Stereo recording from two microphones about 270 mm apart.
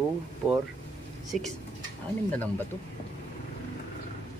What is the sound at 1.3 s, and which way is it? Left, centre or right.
Speech, centre.